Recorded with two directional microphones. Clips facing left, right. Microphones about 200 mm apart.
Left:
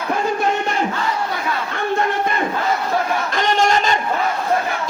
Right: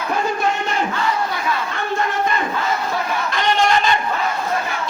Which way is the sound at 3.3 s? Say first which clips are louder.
Even; 45° left (ahead or behind).